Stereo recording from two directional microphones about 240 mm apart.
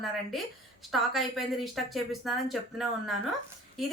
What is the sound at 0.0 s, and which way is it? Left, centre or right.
A woman's voice, centre.